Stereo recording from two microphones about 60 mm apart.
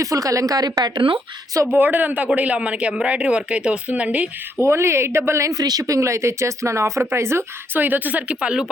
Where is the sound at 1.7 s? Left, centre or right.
Right.